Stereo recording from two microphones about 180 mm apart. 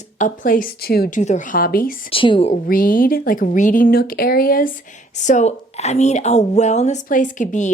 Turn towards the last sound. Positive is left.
turn(degrees=45)  # may be behind; listen again after turning